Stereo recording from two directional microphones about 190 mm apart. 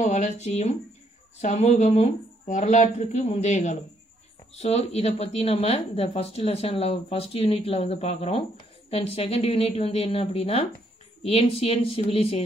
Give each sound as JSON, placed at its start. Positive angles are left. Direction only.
{"t": 0.0, "sound": "speech", "side_deg": 40}